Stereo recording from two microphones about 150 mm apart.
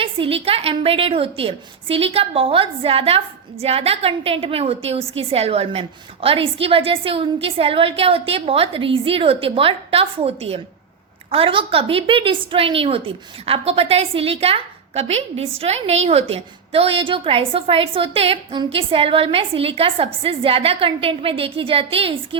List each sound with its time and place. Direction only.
0.0 s a woman's voice: 40° right (ahead or behind)